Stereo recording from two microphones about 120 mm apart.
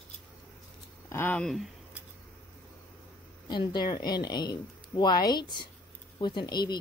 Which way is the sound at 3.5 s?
40° left (ahead or behind).